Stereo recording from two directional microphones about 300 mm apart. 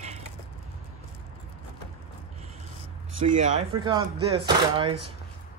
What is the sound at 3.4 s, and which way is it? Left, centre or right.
Speech, centre.